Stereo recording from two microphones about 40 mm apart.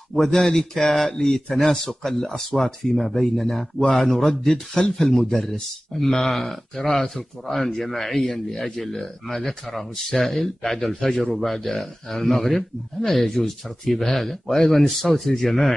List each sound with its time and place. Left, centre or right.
0.1 s speech: centre
5.5 s speech: centre